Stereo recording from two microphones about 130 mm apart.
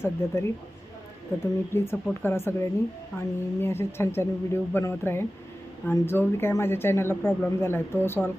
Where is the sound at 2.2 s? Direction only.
20° left (ahead or behind).